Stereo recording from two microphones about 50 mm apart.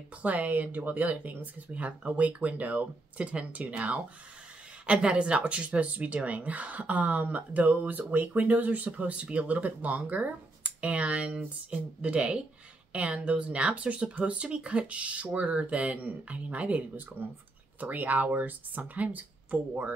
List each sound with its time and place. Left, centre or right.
0.2 s speech: right